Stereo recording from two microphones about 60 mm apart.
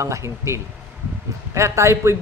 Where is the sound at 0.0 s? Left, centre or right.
Right.